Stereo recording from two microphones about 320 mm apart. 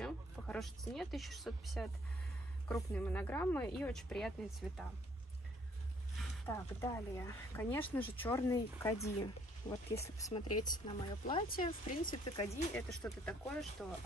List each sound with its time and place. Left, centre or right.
0.0 s a woman's voice: centre
6.1 s speech: centre
11.4 s speech: left
13.0 s a woman's voice: centre